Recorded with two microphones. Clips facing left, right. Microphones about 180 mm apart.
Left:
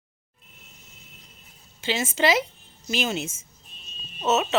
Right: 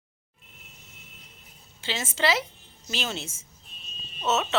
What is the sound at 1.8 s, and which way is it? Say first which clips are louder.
Speech: left 4 dB; 15° left (ahead or behind).